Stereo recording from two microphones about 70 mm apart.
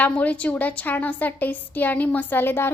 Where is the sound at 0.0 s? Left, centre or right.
Left.